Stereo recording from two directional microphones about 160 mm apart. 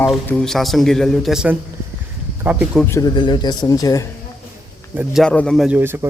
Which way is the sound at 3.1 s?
30° left (ahead or behind).